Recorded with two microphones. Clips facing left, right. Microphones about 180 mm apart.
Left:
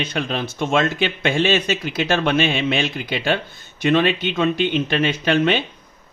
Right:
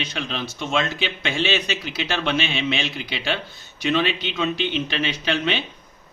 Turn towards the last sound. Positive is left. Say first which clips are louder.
# left 6 dB
turn(degrees=50)  # may be behind; listen again after turning